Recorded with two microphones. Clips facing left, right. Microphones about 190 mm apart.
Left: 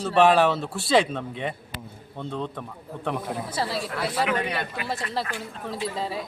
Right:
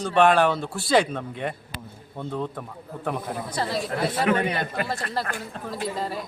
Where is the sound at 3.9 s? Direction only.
30° right (ahead or behind).